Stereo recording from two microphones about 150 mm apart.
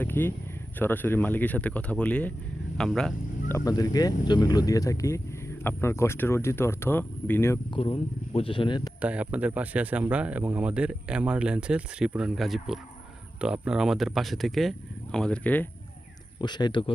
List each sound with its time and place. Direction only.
0.0 s speech: 15° left (ahead or behind)
3.5 s speech: 25° left (ahead or behind)
7.7 s speech: 40° left (ahead or behind)
9.0 s speech: 10° right (ahead or behind); by 15.7 s 10° left (ahead or behind)
16.4 s speech: 30° left (ahead or behind)